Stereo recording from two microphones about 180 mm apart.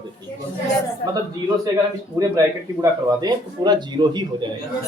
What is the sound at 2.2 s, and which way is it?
Speech, 15° right (ahead or behind).